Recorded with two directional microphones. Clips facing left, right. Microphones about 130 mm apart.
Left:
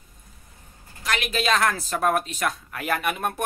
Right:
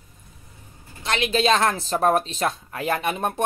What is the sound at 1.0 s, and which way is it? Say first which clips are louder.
Speech: right 4 dB; 25° right (ahead or behind).